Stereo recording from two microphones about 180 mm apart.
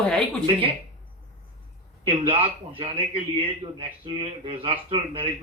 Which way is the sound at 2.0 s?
30° right (ahead or behind).